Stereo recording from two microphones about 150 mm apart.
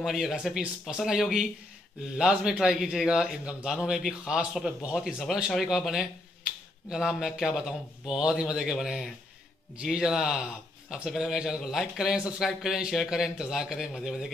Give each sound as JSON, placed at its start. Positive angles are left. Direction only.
{"t": 0.0, "sound": "a man's voice", "side_deg": 0}